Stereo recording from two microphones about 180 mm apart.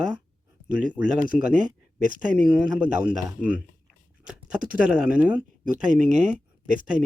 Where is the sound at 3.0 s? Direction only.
5° right (ahead or behind).